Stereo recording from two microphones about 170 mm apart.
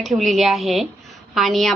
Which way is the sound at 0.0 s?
Centre (ahead or behind).